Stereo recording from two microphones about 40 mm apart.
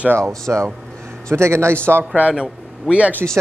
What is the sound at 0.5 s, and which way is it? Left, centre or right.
Speech, right.